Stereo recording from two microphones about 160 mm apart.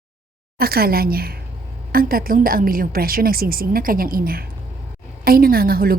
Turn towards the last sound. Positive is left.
turn(degrees=-65)  # may be behind; listen again after turning